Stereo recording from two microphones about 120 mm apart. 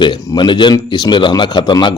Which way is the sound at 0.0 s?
40° left (ahead or behind).